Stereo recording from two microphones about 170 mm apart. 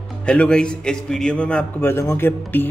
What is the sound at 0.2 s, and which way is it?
A man's voice, 5° left (ahead or behind).